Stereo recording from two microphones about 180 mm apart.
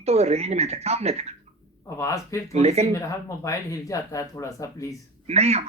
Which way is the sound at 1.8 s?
15° left (ahead or behind).